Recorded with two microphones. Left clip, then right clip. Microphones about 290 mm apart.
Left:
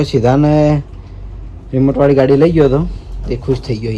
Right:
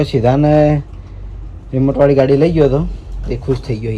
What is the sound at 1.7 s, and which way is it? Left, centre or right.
Speech, left.